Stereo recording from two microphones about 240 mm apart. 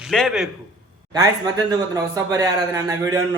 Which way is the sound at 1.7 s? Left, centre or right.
Centre.